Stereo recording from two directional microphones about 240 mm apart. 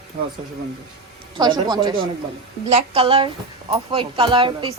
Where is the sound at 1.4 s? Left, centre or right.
Centre.